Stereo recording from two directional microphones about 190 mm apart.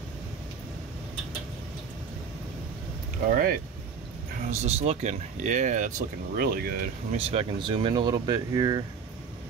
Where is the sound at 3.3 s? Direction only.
50° right (ahead or behind).